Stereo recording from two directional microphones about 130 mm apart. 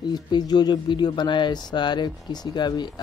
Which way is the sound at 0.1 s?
30° left (ahead or behind).